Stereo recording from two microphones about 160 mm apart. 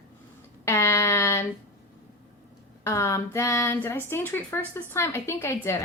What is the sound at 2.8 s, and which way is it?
Speech, 20° left (ahead or behind).